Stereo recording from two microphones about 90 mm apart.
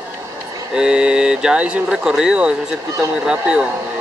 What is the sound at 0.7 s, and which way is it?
Speech, 10° right (ahead or behind).